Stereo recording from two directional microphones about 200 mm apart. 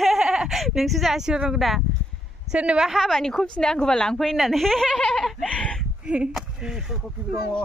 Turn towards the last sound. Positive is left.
turn(degrees=-5)  # may be behind; listen again after turning